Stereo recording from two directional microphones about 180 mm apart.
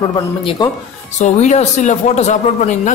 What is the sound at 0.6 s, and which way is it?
Speech, 25° left (ahead or behind).